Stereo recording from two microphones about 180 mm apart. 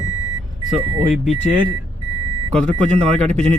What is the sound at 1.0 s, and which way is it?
Speech, 5° right (ahead or behind).